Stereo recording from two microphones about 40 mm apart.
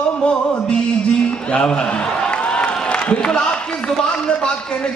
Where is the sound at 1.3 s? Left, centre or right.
Left.